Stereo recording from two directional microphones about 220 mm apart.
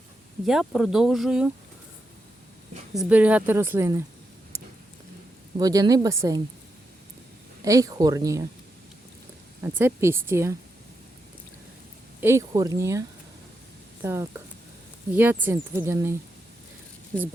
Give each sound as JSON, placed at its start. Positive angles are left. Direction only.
{"t": 0.4, "sound": "speech", "side_deg": 0}
{"t": 2.9, "sound": "speech", "side_deg": -5}
{"t": 5.5, "sound": "speech", "side_deg": -15}
{"t": 7.6, "sound": "speech", "side_deg": -15}
{"t": 9.7, "sound": "speech", "side_deg": -10}
{"t": 12.2, "sound": "speech", "side_deg": -15}